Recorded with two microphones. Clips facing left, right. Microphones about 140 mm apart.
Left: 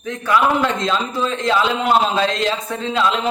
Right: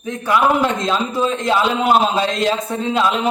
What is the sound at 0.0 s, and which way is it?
A man's voice, 10° right (ahead or behind).